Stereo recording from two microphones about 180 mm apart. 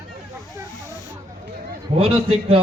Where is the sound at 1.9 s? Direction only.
35° right (ahead or behind).